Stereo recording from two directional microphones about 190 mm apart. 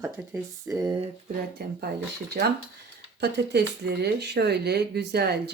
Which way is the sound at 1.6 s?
55° right (ahead or behind).